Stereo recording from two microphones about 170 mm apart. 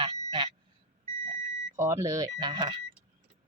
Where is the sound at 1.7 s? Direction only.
15° right (ahead or behind).